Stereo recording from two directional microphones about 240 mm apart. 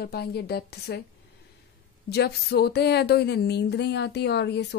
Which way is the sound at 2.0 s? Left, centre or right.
Left.